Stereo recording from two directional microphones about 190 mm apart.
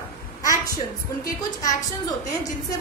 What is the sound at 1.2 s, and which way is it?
Speech, 20° left (ahead or behind).